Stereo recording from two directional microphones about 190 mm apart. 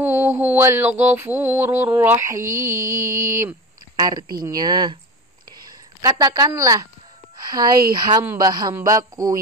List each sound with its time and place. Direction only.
0.0 s mantra: 10° right (ahead or behind)
3.0 s a sound: 45° right (ahead or behind)
3.3 s mantra: 15° right (ahead or behind)
4.0 s speech: 20° right (ahead or behind)
8.7 s mantra: 15° right (ahead or behind)